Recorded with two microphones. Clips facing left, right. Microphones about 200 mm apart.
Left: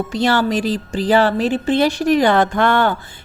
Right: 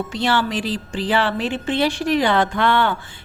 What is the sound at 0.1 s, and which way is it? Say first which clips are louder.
A woman's voice: left 5 dB; 40° left (ahead or behind).